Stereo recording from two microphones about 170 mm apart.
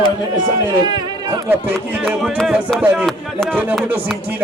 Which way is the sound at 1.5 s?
10° right (ahead or behind).